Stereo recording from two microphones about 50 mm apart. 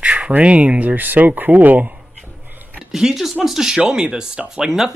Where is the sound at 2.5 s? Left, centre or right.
Right.